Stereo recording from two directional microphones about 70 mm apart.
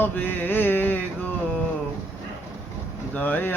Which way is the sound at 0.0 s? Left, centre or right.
Left.